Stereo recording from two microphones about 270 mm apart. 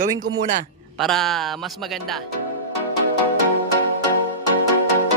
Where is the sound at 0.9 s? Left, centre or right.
Centre.